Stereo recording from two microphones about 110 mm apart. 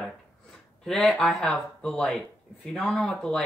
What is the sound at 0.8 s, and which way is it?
Speech, 5° left (ahead or behind).